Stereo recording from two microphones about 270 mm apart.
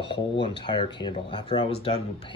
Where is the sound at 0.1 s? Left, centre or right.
Centre.